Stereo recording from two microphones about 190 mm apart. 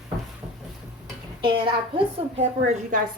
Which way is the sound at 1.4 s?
30° right (ahead or behind).